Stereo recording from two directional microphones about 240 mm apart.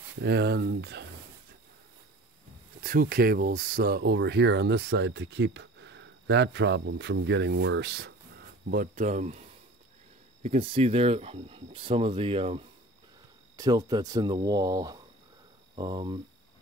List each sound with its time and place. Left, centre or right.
0.2 s speech: right
2.8 s speech: right
10.4 s speech: right